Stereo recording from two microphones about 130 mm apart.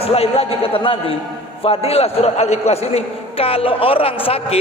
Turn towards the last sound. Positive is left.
turn(degrees=45)  # may be behind; listen again after turning